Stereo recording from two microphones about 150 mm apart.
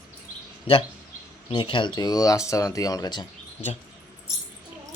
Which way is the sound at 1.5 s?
35° left (ahead or behind).